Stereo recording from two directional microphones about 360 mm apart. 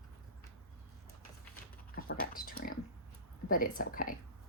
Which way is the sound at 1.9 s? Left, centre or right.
Left.